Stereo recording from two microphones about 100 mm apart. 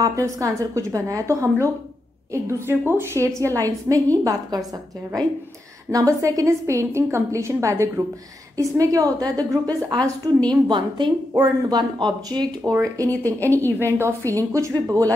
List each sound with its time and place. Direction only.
0.0 s a woman's voice: 35° right (ahead or behind)
5.9 s a woman's voice: 35° right (ahead or behind)
10.5 s a woman's voice: 50° right (ahead or behind)
13.1 s a woman's voice: 20° left (ahead or behind)
13.8 s a woman's voice: 30° right (ahead or behind)